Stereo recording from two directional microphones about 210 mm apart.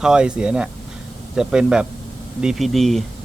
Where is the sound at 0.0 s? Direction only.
5° right (ahead or behind).